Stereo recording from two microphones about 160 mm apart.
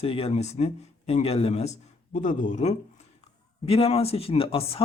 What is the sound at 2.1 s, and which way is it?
Speech, 50° left (ahead or behind).